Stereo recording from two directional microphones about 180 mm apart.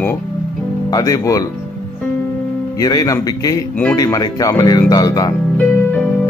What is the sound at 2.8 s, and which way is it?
Speech, 20° left (ahead or behind).